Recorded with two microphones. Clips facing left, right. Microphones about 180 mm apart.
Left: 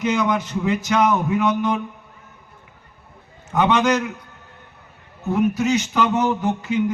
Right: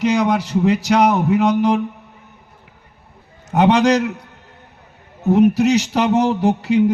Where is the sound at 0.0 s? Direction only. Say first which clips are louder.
Right 4 dB; 75° right (ahead or behind).